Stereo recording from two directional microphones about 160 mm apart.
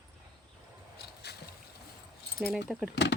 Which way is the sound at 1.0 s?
90° left.